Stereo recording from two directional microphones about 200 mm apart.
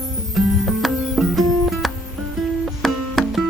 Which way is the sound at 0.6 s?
Centre (ahead or behind).